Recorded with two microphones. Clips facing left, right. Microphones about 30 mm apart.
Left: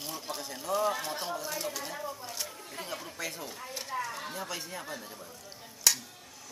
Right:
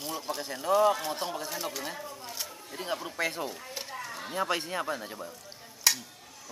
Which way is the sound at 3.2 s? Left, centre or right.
Right.